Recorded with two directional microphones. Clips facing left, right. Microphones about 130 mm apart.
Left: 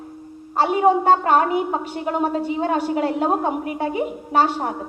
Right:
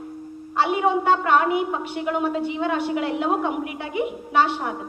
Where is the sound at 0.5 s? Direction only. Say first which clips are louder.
Left 4 dB; 40° left (ahead or behind).